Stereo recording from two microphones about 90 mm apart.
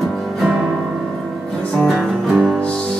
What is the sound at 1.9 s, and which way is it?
Music, centre (ahead or behind).